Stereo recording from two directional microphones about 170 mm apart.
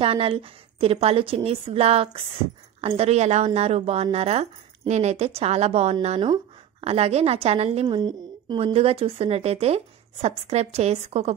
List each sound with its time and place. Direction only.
0.0 s a woman's voice: 35° right (ahead or behind)